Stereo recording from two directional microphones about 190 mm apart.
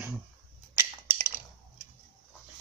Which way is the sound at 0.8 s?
10° right (ahead or behind).